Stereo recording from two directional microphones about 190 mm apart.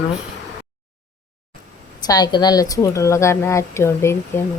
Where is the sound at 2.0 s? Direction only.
20° left (ahead or behind).